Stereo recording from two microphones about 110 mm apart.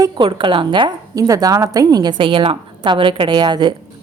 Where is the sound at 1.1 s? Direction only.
35° right (ahead or behind).